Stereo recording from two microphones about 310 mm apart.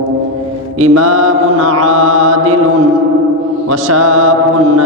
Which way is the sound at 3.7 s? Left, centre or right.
Right.